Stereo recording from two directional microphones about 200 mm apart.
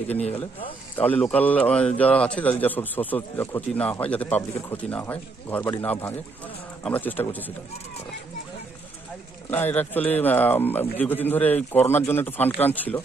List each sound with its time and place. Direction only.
0.1 s speech: 30° left (ahead or behind)
0.9 s speech: 10° left (ahead or behind)
9.5 s speech: 10° left (ahead or behind)